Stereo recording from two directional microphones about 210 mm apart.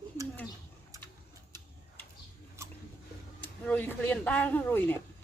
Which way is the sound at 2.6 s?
10° right (ahead or behind).